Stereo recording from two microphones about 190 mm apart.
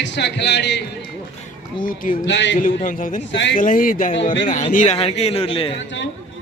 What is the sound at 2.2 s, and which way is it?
Speech, 70° left (ahead or behind).